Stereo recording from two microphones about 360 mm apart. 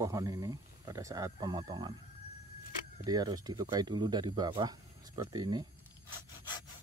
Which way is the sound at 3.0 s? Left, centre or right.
Centre.